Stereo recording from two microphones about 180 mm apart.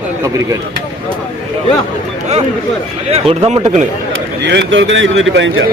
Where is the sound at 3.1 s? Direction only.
35° right (ahead or behind).